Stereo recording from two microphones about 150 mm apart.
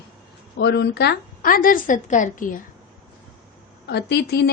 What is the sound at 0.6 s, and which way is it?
A woman's voice, 90° left.